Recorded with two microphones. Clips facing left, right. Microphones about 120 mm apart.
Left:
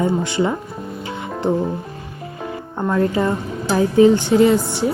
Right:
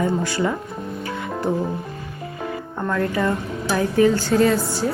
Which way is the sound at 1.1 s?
25° left (ahead or behind).